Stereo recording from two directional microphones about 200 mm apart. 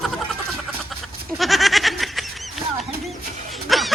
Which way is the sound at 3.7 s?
Centre (ahead or behind).